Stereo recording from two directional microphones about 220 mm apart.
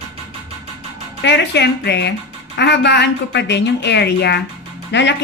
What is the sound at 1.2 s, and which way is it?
A woman's voice, 50° left (ahead or behind).